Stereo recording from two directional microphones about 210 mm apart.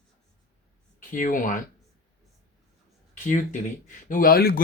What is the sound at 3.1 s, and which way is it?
Speech, 35° left (ahead or behind).